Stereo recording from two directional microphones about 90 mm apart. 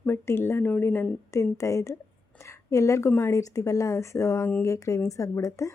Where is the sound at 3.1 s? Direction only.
25° left (ahead or behind).